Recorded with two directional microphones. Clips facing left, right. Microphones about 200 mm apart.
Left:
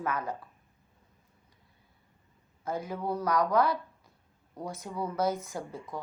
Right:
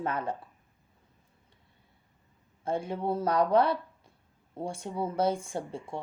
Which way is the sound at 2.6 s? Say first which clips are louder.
Right 3 dB; 30° right (ahead or behind).